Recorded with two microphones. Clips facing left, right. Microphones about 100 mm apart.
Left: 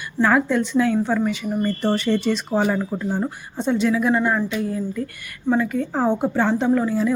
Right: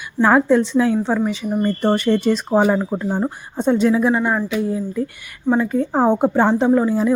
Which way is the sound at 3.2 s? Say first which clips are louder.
Right 3 dB; 45° right (ahead or behind).